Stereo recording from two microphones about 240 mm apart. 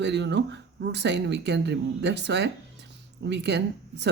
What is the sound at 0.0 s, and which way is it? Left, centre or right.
Speech, right.